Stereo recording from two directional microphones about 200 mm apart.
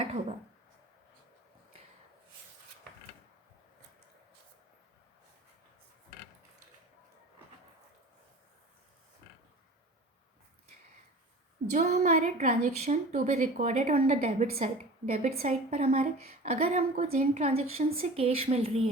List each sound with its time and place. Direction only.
11.7 s a woman's voice: 35° right (ahead or behind)